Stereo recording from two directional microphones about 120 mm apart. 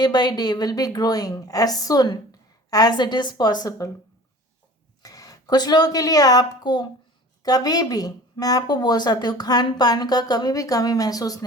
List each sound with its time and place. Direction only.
0.0 s speech: 35° left (ahead or behind)
5.0 s a woman's voice: 30° left (ahead or behind)